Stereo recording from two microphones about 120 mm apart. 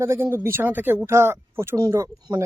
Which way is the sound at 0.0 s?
20° right (ahead or behind).